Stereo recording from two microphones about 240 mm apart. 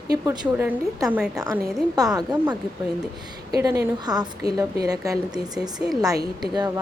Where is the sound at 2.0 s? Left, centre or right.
Centre.